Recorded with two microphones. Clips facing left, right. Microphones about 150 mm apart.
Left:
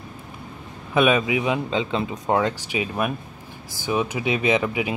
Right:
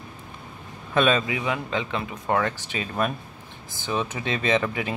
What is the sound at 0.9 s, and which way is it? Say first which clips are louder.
Speech: left 3 dB; 10° left (ahead or behind).